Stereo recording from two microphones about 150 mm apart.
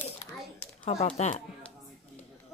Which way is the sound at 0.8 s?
45° left (ahead or behind).